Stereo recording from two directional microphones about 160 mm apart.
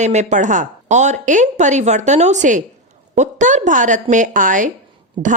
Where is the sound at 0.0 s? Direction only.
45° right (ahead or behind).